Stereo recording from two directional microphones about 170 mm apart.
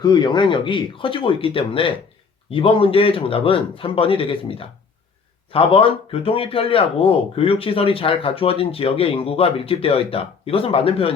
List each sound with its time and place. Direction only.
0.0 s speech: 25° left (ahead or behind)